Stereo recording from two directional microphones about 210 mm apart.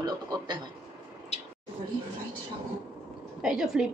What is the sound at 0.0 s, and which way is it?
Speech, 20° right (ahead or behind).